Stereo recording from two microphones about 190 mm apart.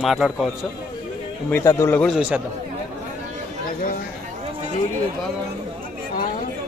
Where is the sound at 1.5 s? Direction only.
15° left (ahead or behind).